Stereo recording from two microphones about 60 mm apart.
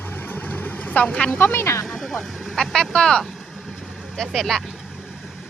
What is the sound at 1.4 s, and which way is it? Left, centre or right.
Speech, left.